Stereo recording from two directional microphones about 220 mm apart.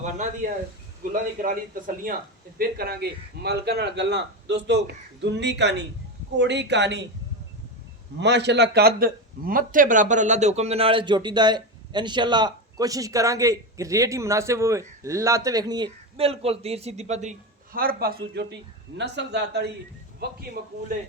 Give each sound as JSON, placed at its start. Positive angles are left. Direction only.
{"t": 0.0, "sound": "a man's voice", "side_deg": -35}
{"t": 8.2, "sound": "a man's voice", "side_deg": -50}